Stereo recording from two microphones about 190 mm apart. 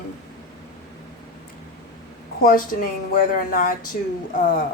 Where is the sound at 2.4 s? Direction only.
45° left (ahead or behind).